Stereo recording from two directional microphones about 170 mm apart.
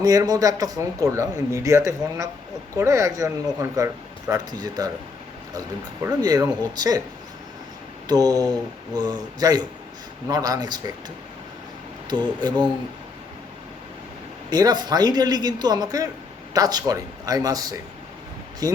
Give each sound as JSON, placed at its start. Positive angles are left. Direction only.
{"t": 0.0, "sound": "a man's voice", "side_deg": -20}
{"t": 8.0, "sound": "a man's voice", "side_deg": -20}
{"t": 12.1, "sound": "a man's voice", "side_deg": -25}
{"t": 14.5, "sound": "a man's voice", "side_deg": -25}